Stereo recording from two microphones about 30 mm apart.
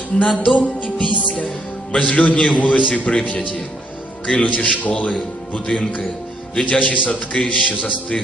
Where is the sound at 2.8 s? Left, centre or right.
Left.